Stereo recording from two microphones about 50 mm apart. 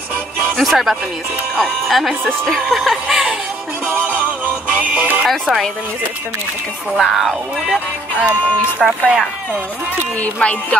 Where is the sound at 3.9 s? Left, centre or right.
Right.